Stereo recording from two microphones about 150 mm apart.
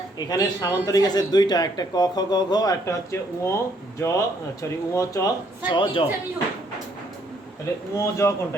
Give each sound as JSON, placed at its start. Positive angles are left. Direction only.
{"t": 0.3, "sound": "speech", "side_deg": 25}
{"t": 5.7, "sound": "a man's voice", "side_deg": 35}
{"t": 7.9, "sound": "speech", "side_deg": 20}